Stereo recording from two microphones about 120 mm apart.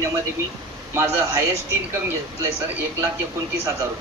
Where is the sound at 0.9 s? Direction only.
25° right (ahead or behind).